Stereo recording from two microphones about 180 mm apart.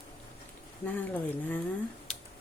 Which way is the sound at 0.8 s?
10° left (ahead or behind).